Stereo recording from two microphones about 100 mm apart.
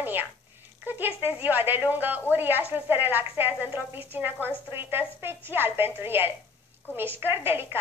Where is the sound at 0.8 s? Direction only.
20° right (ahead or behind).